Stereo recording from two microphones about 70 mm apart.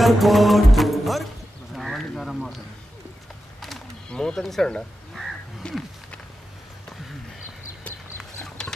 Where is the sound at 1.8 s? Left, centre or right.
Centre.